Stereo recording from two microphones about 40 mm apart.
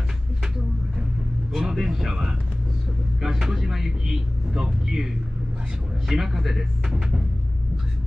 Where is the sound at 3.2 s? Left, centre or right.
Centre.